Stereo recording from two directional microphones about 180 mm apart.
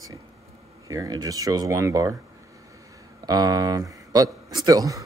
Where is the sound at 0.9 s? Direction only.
20° right (ahead or behind).